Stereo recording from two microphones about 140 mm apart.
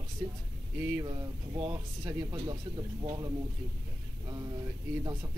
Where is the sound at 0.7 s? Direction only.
10° right (ahead or behind).